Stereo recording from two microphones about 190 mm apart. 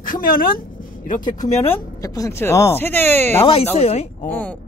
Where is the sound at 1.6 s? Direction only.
20° left (ahead or behind).